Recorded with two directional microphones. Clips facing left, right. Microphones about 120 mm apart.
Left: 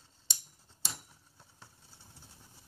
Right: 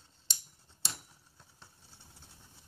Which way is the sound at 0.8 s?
10° left (ahead or behind).